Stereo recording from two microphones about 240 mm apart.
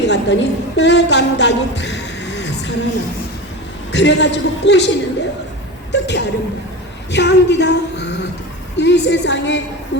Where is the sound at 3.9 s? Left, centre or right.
Left.